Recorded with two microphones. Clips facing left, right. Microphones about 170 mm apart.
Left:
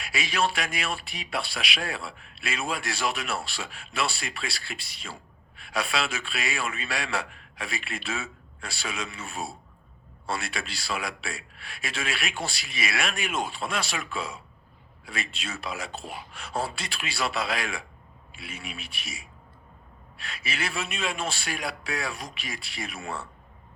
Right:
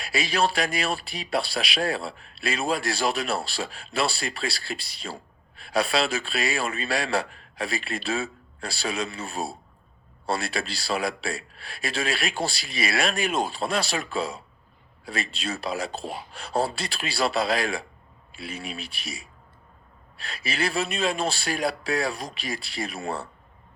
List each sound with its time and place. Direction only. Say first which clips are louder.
0.0 s speech: right 3 dB; 35° right (ahead or behind)